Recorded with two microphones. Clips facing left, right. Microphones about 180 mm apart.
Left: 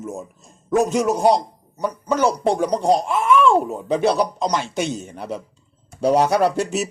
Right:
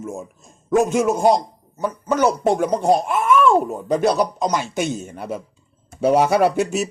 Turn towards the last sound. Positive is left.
turn(degrees=0)  # may be behind; listen again after turning